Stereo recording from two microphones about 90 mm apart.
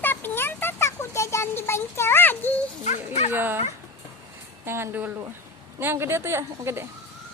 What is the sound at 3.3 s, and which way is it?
Dog, 25° right (ahead or behind).